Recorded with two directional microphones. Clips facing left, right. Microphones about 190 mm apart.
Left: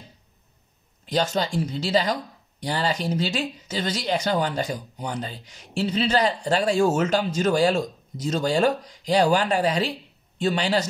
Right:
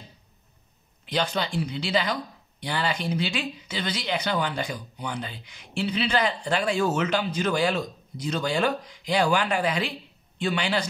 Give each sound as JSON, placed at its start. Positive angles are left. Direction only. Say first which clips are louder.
{"t": 1.0, "sound": "speech", "louder": "left 3 dB", "side_deg": 40}